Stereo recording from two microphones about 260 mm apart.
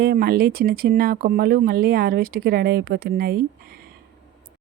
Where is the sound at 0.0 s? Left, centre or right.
Right.